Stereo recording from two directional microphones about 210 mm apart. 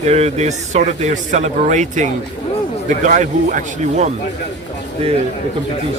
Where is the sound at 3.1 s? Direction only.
35° right (ahead or behind).